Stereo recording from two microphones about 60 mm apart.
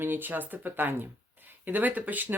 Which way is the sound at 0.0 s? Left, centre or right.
Right.